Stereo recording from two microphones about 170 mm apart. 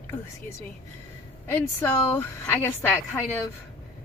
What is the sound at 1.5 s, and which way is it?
Speech, 10° left (ahead or behind).